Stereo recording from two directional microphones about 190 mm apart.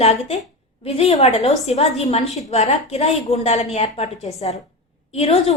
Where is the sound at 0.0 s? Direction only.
35° left (ahead or behind).